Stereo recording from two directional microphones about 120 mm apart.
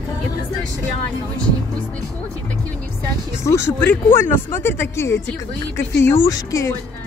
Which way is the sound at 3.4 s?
25° left (ahead or behind).